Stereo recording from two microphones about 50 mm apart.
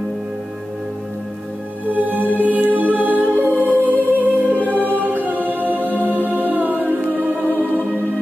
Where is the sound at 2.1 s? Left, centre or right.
Right.